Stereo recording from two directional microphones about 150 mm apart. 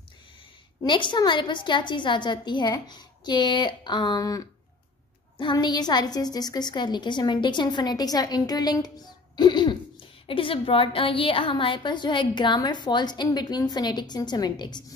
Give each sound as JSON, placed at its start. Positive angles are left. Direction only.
{"t": 0.8, "sound": "a woman's voice", "side_deg": 30}